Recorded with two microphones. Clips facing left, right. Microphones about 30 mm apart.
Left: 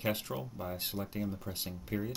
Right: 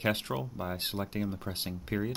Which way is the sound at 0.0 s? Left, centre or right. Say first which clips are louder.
Right 4 dB; right.